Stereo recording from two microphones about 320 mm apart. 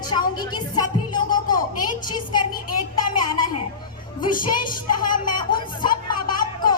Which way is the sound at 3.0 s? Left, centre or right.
Left.